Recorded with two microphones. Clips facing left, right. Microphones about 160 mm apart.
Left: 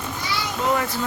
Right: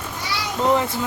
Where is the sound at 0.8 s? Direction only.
20° right (ahead or behind).